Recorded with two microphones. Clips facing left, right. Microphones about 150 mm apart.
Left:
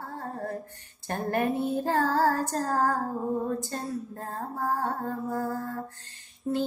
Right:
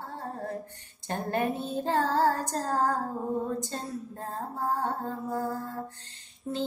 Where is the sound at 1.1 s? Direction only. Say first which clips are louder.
Left 2 dB; 20° right (ahead or behind).